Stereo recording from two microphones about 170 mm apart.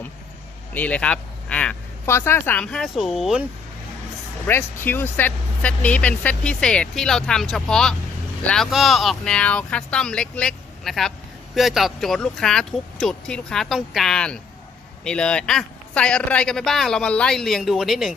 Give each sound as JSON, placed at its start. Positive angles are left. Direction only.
{"t": 0.7, "sound": "speech", "side_deg": 10}
{"t": 4.4, "sound": "a man's voice", "side_deg": 10}